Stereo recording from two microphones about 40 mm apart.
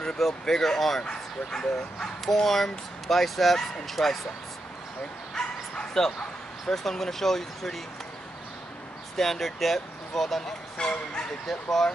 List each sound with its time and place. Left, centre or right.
0.2 s speech: centre
1.0 s speech: centre
2.0 s speech: centre
5.3 s bow-wow: centre
6.7 s speech: centre
9.1 s speech: centre
10.8 s speech: left
11.4 s speech: centre